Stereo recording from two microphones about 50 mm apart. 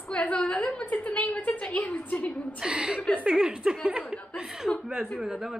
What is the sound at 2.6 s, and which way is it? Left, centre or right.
A woman's voice, centre.